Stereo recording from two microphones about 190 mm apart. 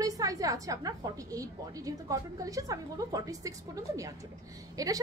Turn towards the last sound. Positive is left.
turn(degrees=-20)  # may be behind; listen again after turning